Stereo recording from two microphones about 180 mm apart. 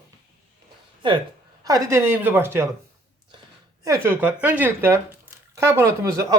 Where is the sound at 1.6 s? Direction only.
20° right (ahead or behind).